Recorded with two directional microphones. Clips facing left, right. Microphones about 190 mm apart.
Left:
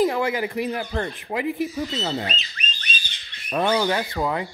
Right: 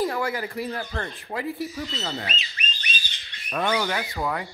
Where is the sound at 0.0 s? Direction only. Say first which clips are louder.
Left 5 dB; 20° left (ahead or behind).